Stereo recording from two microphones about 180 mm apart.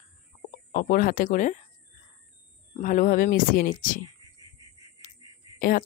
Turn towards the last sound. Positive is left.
turn(degrees=50)  # may be behind; listen again after turning